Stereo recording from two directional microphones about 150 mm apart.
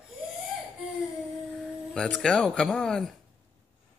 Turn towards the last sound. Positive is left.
turn(degrees=5)  # may be behind; listen again after turning